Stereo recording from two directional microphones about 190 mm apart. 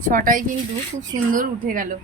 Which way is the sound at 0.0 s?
45° right (ahead or behind).